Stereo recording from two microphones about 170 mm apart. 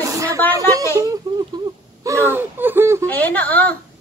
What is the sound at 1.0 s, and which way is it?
Speech, 20° right (ahead or behind).